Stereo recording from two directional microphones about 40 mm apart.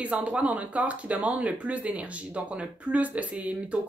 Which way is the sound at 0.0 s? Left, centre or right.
Right.